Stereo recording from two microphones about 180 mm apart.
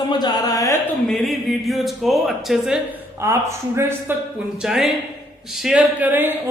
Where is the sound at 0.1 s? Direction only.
25° left (ahead or behind).